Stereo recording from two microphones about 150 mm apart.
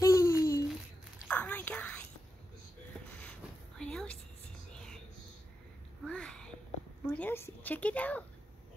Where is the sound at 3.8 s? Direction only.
5° left (ahead or behind).